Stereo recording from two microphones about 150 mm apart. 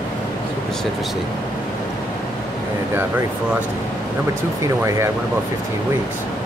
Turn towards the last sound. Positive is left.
turn(degrees=-20)  # may be behind; listen again after turning